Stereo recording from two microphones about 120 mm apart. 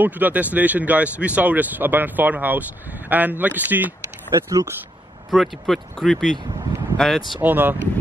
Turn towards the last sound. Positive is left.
turn(degrees=-15)  # may be behind; listen again after turning